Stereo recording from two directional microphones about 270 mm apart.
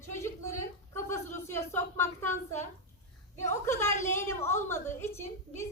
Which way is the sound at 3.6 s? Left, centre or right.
Centre.